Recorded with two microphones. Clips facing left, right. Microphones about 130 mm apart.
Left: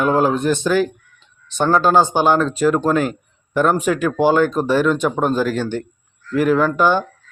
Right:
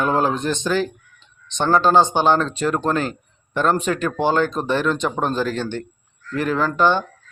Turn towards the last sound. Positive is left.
turn(degrees=10)  # may be behind; listen again after turning